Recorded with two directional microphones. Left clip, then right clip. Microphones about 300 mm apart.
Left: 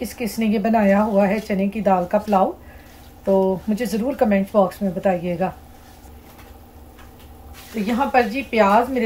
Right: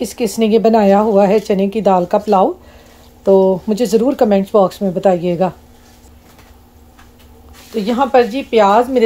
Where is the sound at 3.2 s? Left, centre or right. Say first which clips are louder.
Right 8 dB; right.